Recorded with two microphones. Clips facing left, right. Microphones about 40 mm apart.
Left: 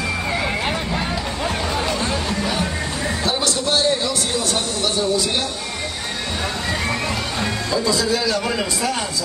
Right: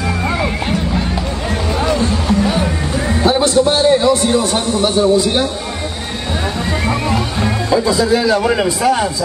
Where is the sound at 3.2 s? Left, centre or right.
Right.